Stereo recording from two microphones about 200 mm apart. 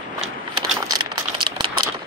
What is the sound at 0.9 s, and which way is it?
Rattle, 20° right (ahead or behind).